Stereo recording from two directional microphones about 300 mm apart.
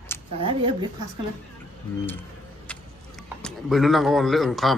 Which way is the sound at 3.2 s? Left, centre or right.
Centre.